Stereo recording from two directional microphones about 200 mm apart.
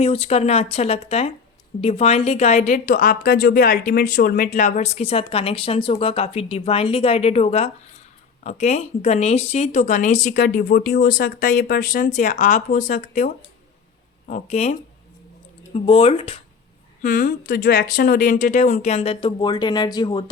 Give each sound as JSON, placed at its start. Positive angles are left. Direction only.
{"t": 0.0, "sound": "a woman's voice", "side_deg": 30}
{"t": 17.0, "sound": "a woman's voice", "side_deg": 40}